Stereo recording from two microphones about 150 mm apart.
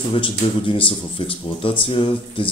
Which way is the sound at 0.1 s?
35° left (ahead or behind).